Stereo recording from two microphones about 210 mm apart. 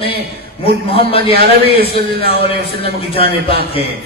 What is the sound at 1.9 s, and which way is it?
A man's voice, 50° right (ahead or behind).